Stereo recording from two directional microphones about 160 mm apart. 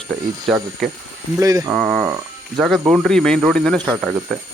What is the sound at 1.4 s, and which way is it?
Speech, 20° right (ahead or behind).